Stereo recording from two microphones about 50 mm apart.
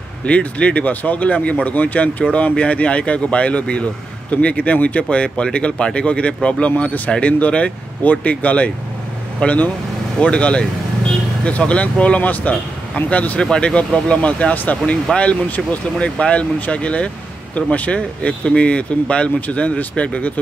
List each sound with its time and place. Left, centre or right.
0.2 s speech: left
13.4 s speech: centre
14.5 s speech: left
15.1 s speech: centre